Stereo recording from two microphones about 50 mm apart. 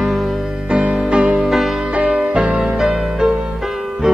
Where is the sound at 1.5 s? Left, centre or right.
Centre.